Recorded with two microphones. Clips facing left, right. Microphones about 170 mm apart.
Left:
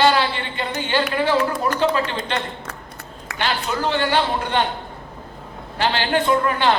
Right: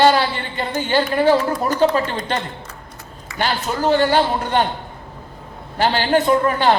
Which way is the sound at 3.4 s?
40° right (ahead or behind).